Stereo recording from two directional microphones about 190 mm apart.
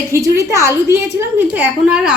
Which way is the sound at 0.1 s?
15° right (ahead or behind).